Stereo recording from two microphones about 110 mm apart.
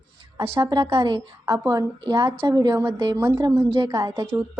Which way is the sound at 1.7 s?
35° right (ahead or behind).